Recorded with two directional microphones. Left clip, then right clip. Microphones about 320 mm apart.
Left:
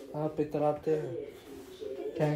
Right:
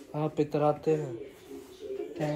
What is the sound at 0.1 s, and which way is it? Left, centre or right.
Speech, right.